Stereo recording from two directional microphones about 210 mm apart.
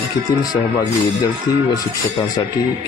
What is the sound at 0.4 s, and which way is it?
Speech, 20° left (ahead or behind).